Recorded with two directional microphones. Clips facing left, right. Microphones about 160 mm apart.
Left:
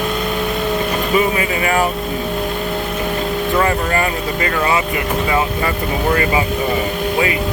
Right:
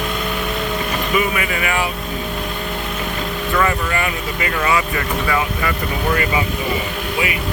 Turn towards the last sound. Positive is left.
turn(degrees=25)  # may be behind; listen again after turning